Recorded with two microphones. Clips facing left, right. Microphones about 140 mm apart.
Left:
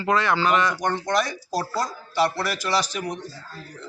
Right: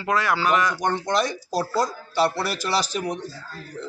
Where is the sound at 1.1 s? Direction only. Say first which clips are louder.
Right 1 dB; 25° right (ahead or behind).